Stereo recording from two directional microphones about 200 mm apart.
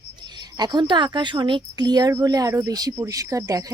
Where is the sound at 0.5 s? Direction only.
20° right (ahead or behind).